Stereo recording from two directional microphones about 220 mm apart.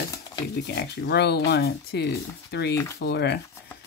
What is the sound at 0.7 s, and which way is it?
Speech, 50° left (ahead or behind).